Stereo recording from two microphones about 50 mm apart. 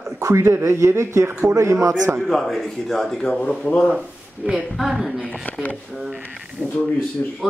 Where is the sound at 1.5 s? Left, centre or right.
Right.